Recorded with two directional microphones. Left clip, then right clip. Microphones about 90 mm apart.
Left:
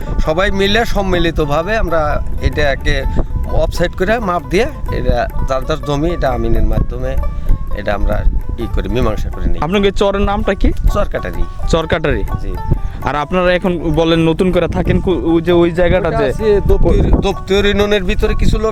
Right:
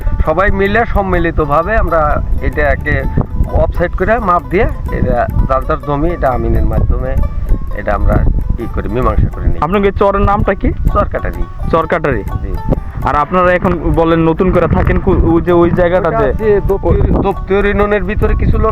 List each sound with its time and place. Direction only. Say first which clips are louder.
0.3 s speech: right 2 dB; 35° left (ahead or behind); by 16.3 s 10° left (ahead or behind)
16.4 s speech: right 1 dB; 35° left (ahead or behind)